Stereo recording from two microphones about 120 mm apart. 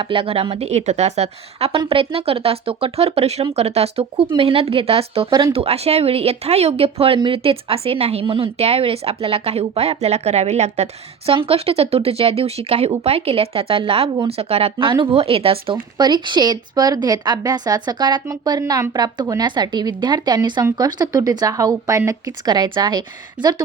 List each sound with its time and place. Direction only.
0.0 s speech: 45° right (ahead or behind)
1.8 s speech: 45° right (ahead or behind); by 10.8 s 65° right (ahead or behind)
11.3 s speech: 50° right (ahead or behind); by 23.6 s 35° right (ahead or behind)